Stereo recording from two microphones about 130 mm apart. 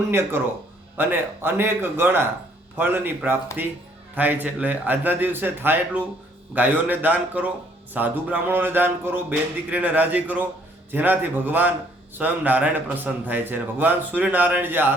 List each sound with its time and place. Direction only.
0.1 s a man's voice: 15° right (ahead or behind)